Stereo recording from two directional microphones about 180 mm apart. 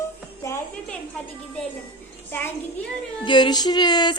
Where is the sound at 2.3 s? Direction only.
10° left (ahead or behind).